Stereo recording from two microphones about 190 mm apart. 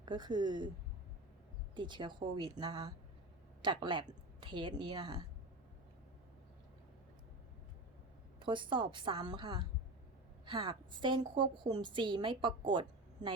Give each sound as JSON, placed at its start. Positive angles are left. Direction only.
{"t": 0.0, "sound": "a woman's voice", "side_deg": -25}
{"t": 1.7, "sound": "a woman's voice", "side_deg": -25}
{"t": 8.4, "sound": "a woman's voice", "side_deg": -25}